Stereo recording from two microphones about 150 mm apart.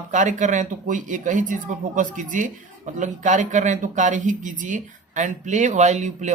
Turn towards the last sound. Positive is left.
turn(degrees=-50)  # may be behind; listen again after turning